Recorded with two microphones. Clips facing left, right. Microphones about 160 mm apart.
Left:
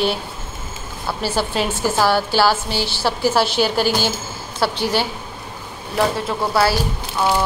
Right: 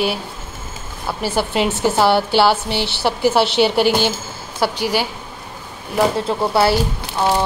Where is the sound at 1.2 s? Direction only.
20° right (ahead or behind).